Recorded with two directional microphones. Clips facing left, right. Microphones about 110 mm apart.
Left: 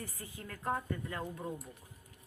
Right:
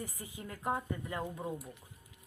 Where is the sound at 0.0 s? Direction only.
15° right (ahead or behind).